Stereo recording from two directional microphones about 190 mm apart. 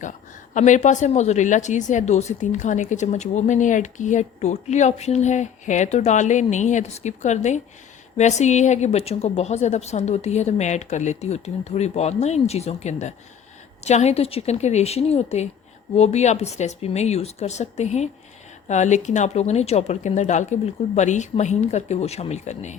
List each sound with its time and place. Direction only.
0.5 s a woman's voice: 40° left (ahead or behind)